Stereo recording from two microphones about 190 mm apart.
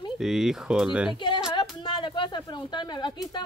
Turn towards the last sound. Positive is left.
turn(degrees=20)  # may be behind; listen again after turning